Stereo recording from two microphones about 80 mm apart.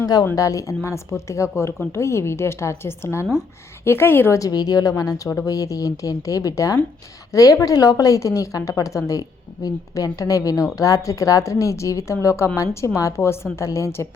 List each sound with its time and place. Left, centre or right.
0.0 s speech: left
0.3 s a woman's voice: left
4.3 s a woman's voice: left